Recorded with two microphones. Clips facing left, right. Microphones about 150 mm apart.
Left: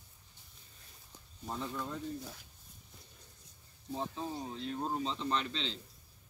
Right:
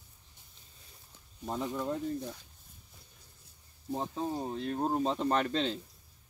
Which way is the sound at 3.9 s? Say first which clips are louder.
Right 4 dB; 45° right (ahead or behind).